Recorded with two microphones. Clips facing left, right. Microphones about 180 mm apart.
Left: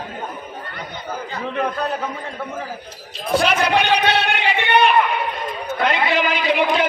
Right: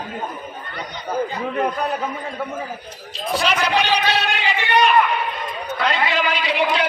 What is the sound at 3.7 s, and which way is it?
Speech, 55° left (ahead or behind).